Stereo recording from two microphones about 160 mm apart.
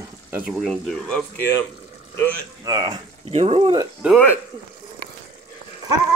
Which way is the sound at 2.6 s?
25° right (ahead or behind).